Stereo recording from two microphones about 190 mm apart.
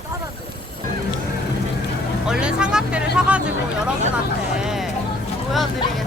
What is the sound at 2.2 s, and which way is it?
Music, 5° right (ahead or behind).